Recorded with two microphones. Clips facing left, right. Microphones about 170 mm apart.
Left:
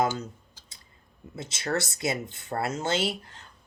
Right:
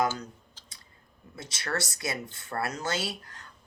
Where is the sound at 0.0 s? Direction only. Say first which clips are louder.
Left 2 dB; 25° left (ahead or behind).